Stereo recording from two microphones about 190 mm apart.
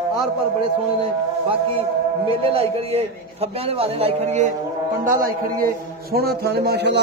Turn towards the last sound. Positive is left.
turn(degrees=-60)  # may be behind; listen again after turning